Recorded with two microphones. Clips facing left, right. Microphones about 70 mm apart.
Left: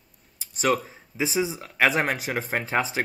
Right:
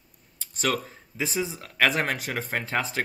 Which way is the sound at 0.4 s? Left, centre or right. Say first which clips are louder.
Left 4 dB; centre.